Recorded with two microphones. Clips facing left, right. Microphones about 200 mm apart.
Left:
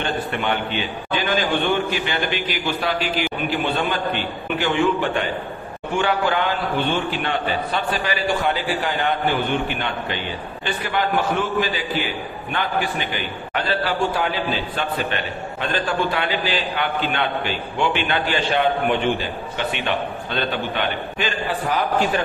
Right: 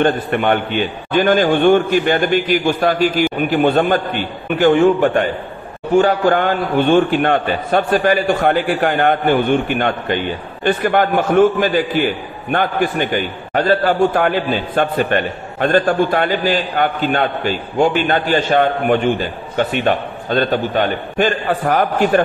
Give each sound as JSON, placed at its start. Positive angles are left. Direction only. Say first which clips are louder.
{"t": 0.0, "sound": "a man's voice", "louder": "right 8 dB", "side_deg": -50}